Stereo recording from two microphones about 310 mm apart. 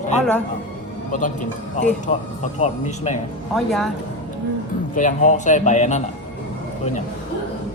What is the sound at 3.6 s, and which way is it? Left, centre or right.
Speech, centre.